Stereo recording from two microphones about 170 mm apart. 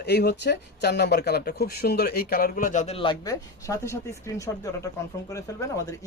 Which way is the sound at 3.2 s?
20° left (ahead or behind).